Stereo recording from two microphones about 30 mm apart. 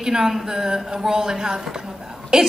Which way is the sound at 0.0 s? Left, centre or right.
Centre.